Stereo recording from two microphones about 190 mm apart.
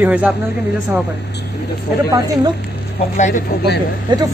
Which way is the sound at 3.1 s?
40° left (ahead or behind).